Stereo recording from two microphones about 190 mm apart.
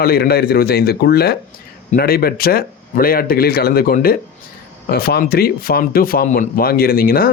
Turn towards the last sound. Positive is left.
turn(degrees=50)  # may be behind; listen again after turning